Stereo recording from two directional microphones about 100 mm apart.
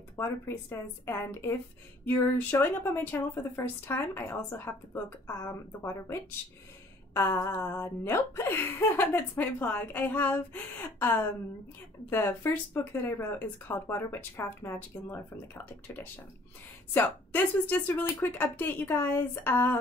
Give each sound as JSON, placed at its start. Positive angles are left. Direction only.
{"t": 0.1, "sound": "speech", "side_deg": 30}
{"t": 16.9, "sound": "speech", "side_deg": 20}